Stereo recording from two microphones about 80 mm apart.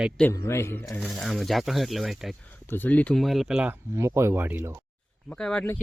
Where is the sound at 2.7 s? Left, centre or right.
Left.